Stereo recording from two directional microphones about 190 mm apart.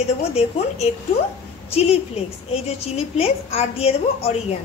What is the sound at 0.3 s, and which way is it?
A woman's voice, 35° left (ahead or behind).